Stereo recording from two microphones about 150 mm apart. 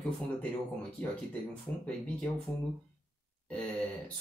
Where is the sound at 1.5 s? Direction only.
10° left (ahead or behind).